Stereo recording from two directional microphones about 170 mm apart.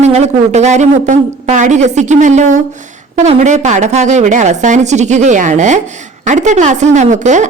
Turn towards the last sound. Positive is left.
turn(degrees=-45)  # may be behind; listen again after turning